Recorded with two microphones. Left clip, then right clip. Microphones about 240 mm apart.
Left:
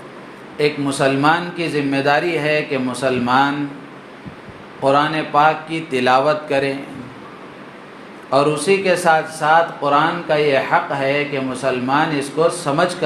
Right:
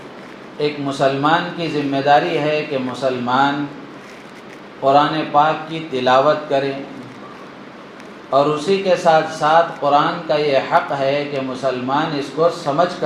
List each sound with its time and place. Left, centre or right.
0.6 s speech: left
4.8 s speech: left
8.3 s speech: left